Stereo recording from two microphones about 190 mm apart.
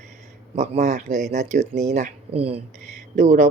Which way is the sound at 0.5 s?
40° right (ahead or behind).